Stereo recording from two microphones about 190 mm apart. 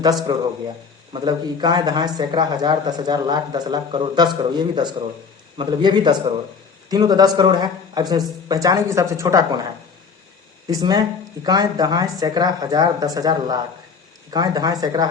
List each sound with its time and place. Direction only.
1.1 s a man's voice: 25° right (ahead or behind)
10.7 s a man's voice: 20° right (ahead or behind)